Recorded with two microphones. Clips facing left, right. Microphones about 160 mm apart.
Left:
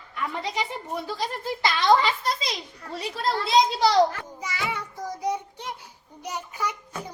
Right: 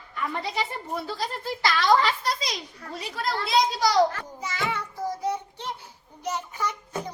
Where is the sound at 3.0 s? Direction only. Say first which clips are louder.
Left 3 dB; 30° left (ahead or behind).